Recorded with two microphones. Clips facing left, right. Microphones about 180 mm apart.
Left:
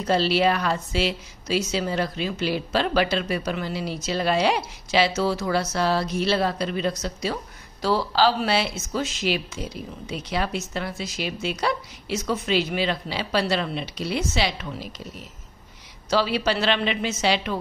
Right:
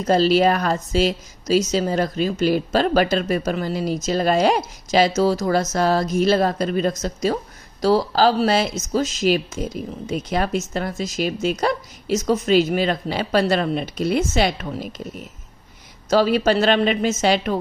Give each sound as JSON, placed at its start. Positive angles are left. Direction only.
{"t": 0.0, "sound": "speech", "side_deg": -45}